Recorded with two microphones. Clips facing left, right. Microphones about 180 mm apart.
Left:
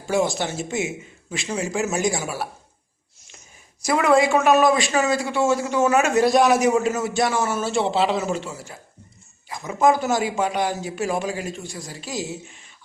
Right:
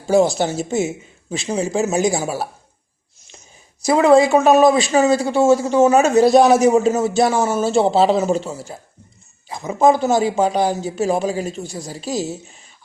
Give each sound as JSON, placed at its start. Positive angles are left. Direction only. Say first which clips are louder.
{"t": 0.1, "sound": "a man's voice", "louder": "right 7 dB", "side_deg": -35}
{"t": 3.8, "sound": "a man's voice", "louder": "right 6 dB", "side_deg": -25}